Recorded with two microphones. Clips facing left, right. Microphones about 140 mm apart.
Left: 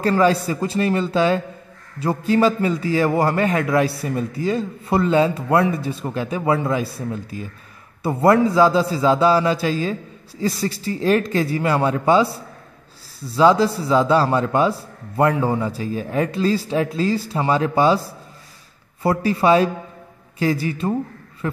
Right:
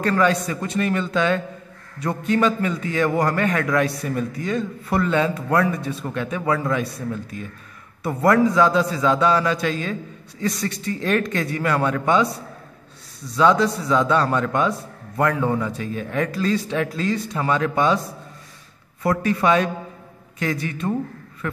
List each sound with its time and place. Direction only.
0.0 s a man's voice: 30° left (ahead or behind)
13.3 s a man's voice: 30° left (ahead or behind)
19.0 s a man's voice: 30° left (ahead or behind)